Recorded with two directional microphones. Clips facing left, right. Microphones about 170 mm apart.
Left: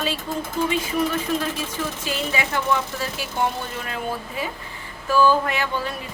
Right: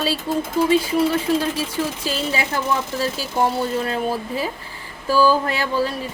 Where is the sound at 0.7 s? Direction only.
30° right (ahead or behind).